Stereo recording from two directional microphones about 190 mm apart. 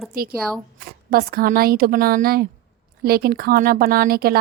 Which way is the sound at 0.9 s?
50° right (ahead or behind).